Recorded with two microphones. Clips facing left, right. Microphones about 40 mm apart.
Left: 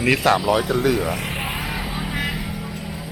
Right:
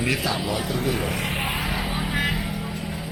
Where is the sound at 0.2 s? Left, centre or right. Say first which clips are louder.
Left 9 dB; left.